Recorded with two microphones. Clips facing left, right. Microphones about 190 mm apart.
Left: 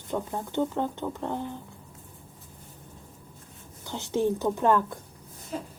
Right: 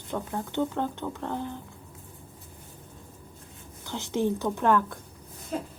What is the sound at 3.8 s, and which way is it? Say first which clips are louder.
Speech: left 1 dB; 10° left (ahead or behind).